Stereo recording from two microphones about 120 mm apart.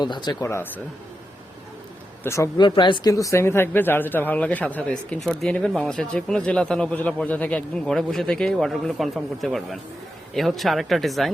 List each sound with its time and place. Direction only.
0.0 s speech: 35° left (ahead or behind)
0.4 s speech: 20° left (ahead or behind)
2.2 s speech: 25° left (ahead or behind)
2.6 s speech: 40° left (ahead or behind); by 11.3 s centre (ahead or behind)